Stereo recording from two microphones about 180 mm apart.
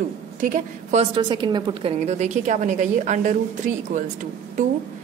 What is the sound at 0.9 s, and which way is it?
A woman's voice, 25° right (ahead or behind).